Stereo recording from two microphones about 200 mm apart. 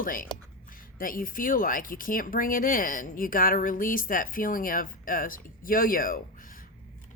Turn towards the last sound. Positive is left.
turn(degrees=45)  # may be behind; listen again after turning